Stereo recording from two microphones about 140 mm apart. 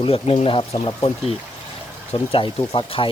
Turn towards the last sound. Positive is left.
turn(degrees=40)  # may be behind; listen again after turning